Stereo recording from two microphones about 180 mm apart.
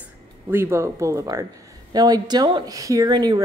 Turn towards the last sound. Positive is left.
turn(degrees=-20)  # may be behind; listen again after turning